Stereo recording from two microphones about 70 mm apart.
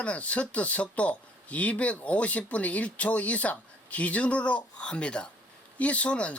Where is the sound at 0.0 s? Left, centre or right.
Centre.